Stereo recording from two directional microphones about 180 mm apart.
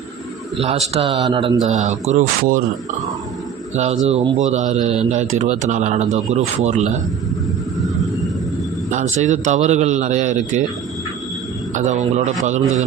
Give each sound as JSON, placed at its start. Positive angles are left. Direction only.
{"t": 0.6, "sound": "speech", "side_deg": -35}
{"t": 1.6, "sound": "speech", "side_deg": -40}
{"t": 4.0, "sound": "speech", "side_deg": -40}
{"t": 8.9, "sound": "speech", "side_deg": -40}
{"t": 11.7, "sound": "speech", "side_deg": -40}